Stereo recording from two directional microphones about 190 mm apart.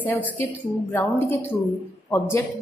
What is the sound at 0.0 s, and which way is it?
A woman's voice, 10° left (ahead or behind).